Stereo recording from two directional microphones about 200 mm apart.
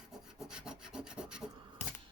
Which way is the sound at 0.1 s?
Centre (ahead or behind).